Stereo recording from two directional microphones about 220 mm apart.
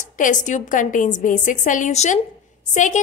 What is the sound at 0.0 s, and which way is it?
A woman's voice, 35° left (ahead or behind).